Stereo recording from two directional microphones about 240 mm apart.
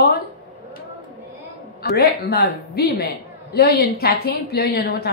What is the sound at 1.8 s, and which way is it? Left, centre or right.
A woman's voice, left.